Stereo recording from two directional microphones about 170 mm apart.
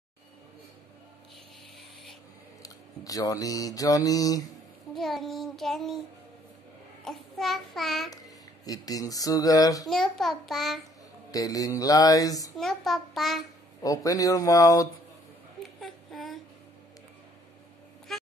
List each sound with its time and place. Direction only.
2.6 s a sound: 20° left (ahead or behind)
4.9 s child singing: centre (ahead or behind)
7.1 s child singing: centre (ahead or behind)
8.6 s speech: 20° left (ahead or behind)
9.8 s child singing: centre (ahead or behind)
11.3 s speech: 20° left (ahead or behind)
12.5 s child singing: centre (ahead or behind)
13.8 s speech: 20° left (ahead or behind)
15.8 s a sound: centre (ahead or behind)
18.1 s a sound: centre (ahead or behind)